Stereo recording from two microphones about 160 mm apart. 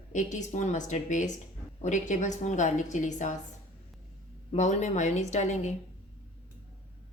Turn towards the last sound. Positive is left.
turn(degrees=45)  # may be behind; listen again after turning